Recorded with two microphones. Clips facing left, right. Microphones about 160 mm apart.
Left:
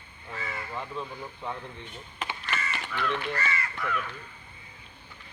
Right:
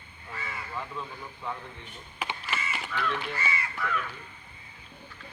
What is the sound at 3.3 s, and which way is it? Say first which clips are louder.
Speech: left 1 dB; 10° right (ahead or behind).